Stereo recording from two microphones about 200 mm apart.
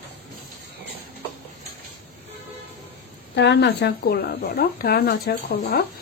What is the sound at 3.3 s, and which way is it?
A woman's voice, 60° left (ahead or behind).